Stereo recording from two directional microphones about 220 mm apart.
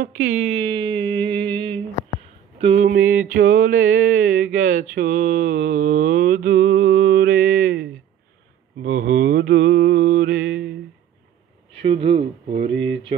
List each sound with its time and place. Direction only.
0.6 s a sound: 25° right (ahead or behind)
2.6 s speech: 30° right (ahead or behind)
3.0 s a sound: 10° right (ahead or behind)
3.3 s speech: 40° right (ahead or behind)
5.8 s mantra: 35° right (ahead or behind)
9.0 s mantra: 40° right (ahead or behind)
11.7 s speech: 25° right (ahead or behind)